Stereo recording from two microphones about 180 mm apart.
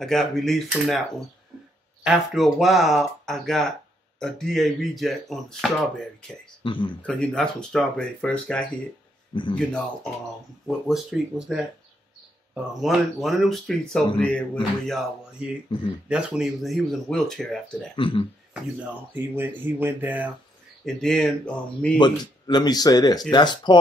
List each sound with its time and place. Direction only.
0.0 s speech: centre (ahead or behind)
6.6 s speech: 25° left (ahead or behind)
7.0 s speech: 5° left (ahead or behind)
9.3 s a man's voice: 25° left (ahead or behind)
10.9 s speech: centre (ahead or behind)
12.8 s speech: centre (ahead or behind)
17.9 s speech: 30° left (ahead or behind)
18.5 s speech: 10° right (ahead or behind)
20.8 s speech: centre (ahead or behind)
21.9 s speech: 25° left (ahead or behind)